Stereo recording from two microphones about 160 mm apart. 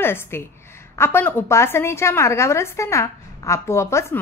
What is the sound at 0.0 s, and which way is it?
A woman's voice, 15° left (ahead or behind).